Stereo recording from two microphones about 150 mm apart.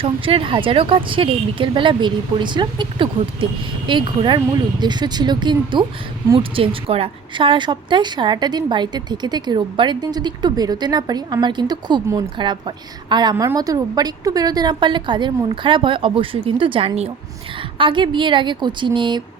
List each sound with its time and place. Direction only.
0.0 s a woman's voice: 35° right (ahead or behind)
12.0 s speech: 20° right (ahead or behind)
12.4 s a woman's voice: 30° right (ahead or behind)
13.3 s a woman's voice: 20° right (ahead or behind)